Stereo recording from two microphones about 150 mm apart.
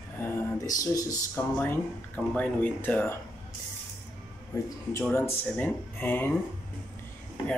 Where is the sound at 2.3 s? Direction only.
10° left (ahead or behind).